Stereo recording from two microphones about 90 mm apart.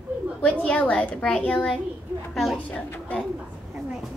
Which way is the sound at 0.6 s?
15° left (ahead or behind).